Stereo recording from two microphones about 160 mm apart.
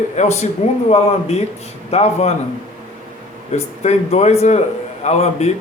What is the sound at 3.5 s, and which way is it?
A man's voice, 45° left (ahead or behind).